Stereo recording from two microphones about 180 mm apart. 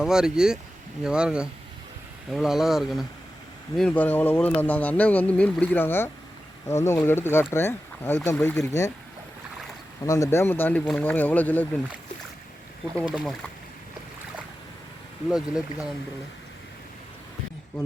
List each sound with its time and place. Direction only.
0.0 s speech: 5° right (ahead or behind); by 8.9 s 15° left (ahead or behind)
10.1 s speech: 15° left (ahead or behind)
13.1 s speech: centre (ahead or behind)
15.3 s speech: 5° right (ahead or behind)